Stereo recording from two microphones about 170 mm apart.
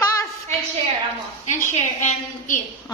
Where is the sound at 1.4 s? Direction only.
45° left (ahead or behind).